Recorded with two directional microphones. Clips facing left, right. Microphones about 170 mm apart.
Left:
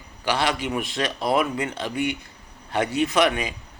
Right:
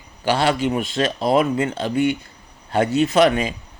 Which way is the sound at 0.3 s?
30° right (ahead or behind).